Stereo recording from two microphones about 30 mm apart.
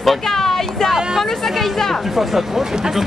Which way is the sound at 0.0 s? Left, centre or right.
Centre.